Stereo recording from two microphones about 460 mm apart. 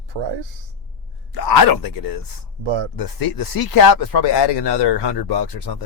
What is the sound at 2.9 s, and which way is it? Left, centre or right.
Speech, left.